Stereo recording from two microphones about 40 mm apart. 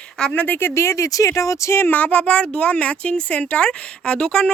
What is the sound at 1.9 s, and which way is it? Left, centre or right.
Speech, left.